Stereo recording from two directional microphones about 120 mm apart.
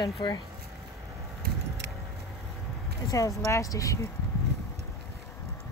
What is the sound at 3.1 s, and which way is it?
Speech, 25° left (ahead or behind).